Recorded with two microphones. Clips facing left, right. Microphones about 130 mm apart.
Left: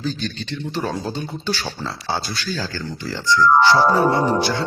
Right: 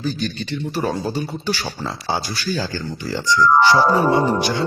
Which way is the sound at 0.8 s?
10° right (ahead or behind).